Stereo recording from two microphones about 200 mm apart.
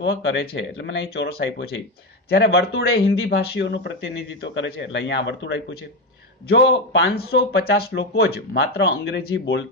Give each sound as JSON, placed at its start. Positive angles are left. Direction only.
{"t": 0.0, "sound": "speech", "side_deg": 65}